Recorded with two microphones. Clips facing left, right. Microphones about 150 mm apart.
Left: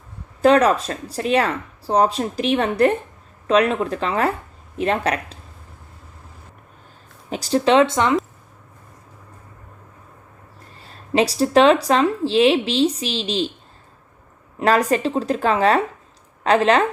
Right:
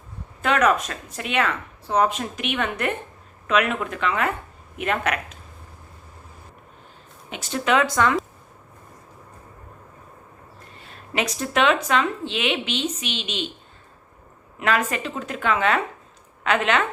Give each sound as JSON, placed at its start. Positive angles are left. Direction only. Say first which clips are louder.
{"t": 0.4, "sound": "speech", "louder": "left 6 dB", "side_deg": 35}
{"t": 7.3, "sound": "speech", "louder": "left 6 dB", "side_deg": 35}
{"t": 10.8, "sound": "speech", "louder": "left 8 dB", "side_deg": 35}
{"t": 14.6, "sound": "speech", "louder": "left 6 dB", "side_deg": 35}